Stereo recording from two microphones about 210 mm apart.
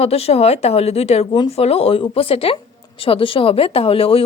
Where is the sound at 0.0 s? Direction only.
30° left (ahead or behind).